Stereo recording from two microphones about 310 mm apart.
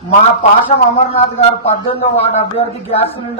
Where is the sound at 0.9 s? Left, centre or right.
Centre.